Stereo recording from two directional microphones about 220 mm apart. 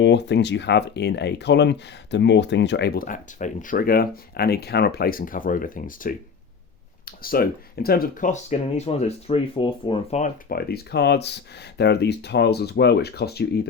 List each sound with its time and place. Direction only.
0.0 s speech: 50° left (ahead or behind)